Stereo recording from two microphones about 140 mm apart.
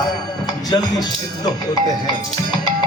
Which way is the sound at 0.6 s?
30° left (ahead or behind).